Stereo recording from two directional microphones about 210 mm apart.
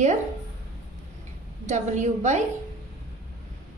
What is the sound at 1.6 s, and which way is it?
Speech, 35° right (ahead or behind).